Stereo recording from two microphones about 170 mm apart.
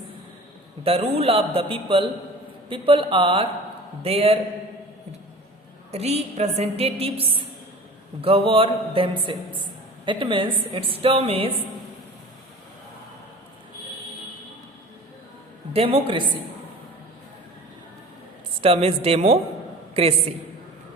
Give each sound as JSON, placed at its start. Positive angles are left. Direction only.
{"t": 0.9, "sound": "a woman's voice", "side_deg": -35}
{"t": 5.9, "sound": "a woman's voice", "side_deg": -40}
{"t": 15.7, "sound": "a woman's voice", "side_deg": -35}
{"t": 18.6, "sound": "a woman's voice", "side_deg": -35}